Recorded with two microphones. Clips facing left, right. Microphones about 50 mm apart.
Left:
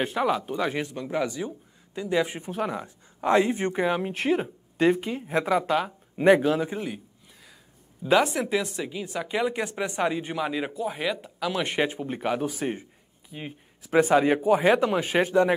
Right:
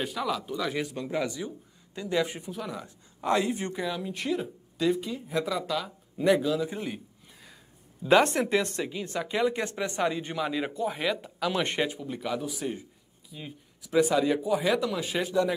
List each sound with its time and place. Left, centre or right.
0.0 s speech: left
0.9 s speech: centre
2.0 s speech: left
2.5 s speech: left
2.8 s speech: left
8.1 s speech: centre
11.9 s speech: left